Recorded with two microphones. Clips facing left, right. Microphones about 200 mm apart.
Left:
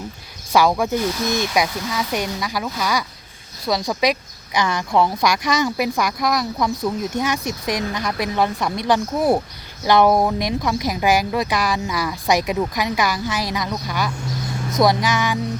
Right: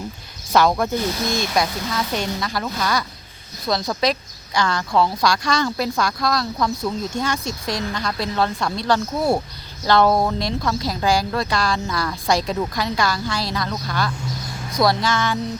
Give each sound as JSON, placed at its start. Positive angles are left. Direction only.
{"t": 0.5, "sound": "speech", "side_deg": 10}